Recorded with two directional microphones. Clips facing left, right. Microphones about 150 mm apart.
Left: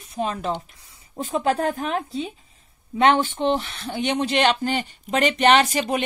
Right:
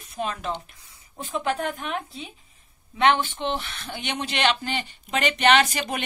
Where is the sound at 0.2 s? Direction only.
30° left (ahead or behind).